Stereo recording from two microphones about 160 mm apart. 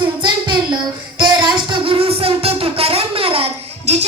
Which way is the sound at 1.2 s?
25° right (ahead or behind).